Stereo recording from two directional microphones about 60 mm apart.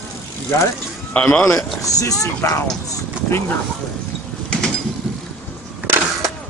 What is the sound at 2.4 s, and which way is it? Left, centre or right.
Speech, left.